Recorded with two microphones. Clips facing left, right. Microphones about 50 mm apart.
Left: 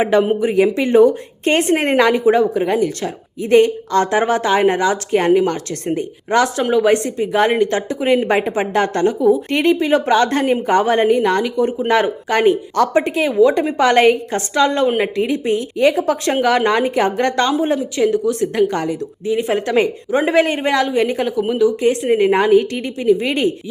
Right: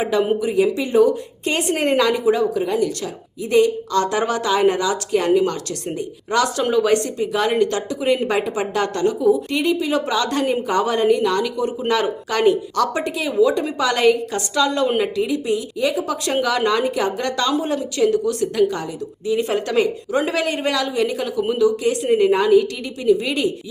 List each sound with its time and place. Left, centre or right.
0.0 s a woman's voice: left
6.6 s a woman's voice: centre; by 9.1 s left
9.3 s a woman's voice: left
17.6 s a woman's voice: left
18.7 s speech: left
19.3 s a woman's voice: left
22.2 s a woman's voice: left